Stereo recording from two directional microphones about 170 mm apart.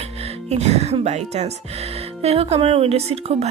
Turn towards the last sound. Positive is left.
turn(degrees=-35)  # may be behind; listen again after turning